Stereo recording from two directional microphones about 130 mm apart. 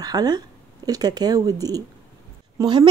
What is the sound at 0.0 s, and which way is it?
Speech, 30° right (ahead or behind).